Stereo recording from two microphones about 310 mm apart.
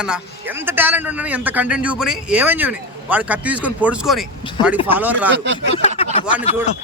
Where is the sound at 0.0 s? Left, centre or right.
Centre.